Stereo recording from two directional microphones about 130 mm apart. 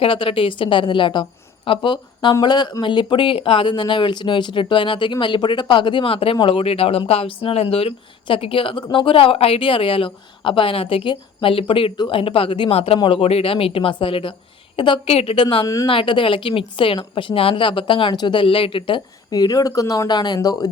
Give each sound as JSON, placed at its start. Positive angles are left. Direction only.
{"t": 0.0, "sound": "a woman's voice", "side_deg": 45}
{"t": 15.6, "sound": "speech", "side_deg": 25}
{"t": 15.9, "sound": "a woman's voice", "side_deg": 40}